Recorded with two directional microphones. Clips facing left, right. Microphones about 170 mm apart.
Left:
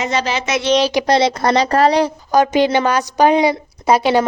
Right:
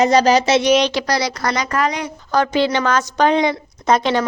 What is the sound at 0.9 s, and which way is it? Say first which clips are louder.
Speech: left 6 dB; 25° left (ahead or behind).